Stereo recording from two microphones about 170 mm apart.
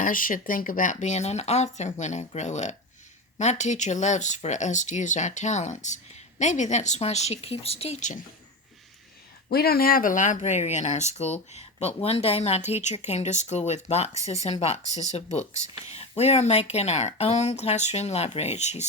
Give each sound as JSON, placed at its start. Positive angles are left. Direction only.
{"t": 0.0, "sound": "speech", "side_deg": 55}
{"t": 9.5, "sound": "speech", "side_deg": 65}